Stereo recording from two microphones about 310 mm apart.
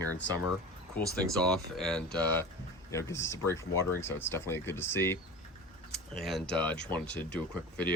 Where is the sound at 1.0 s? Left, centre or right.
Centre.